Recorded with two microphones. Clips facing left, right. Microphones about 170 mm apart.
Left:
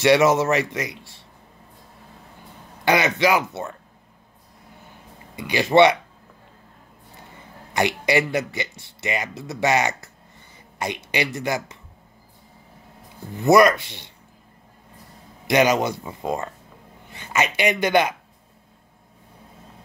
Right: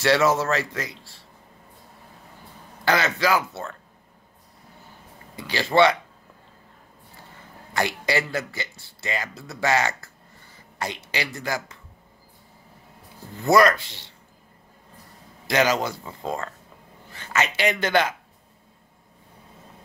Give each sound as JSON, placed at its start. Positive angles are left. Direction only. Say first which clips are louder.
{"t": 0.0, "sound": "speech", "louder": "left 4 dB", "side_deg": 20}
{"t": 2.8, "sound": "speech", "louder": "left 3 dB", "side_deg": 15}
{"t": 5.3, "sound": "speech", "louder": "left 4 dB", "side_deg": 15}
{"t": 7.7, "sound": "speech", "louder": "left 4 dB", "side_deg": 20}
{"t": 13.4, "sound": "speech", "louder": "left 3 dB", "side_deg": 20}
{"t": 15.4, "sound": "speech", "louder": "left 4 dB", "side_deg": 20}